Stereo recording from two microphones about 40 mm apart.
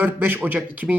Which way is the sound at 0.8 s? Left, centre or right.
Centre.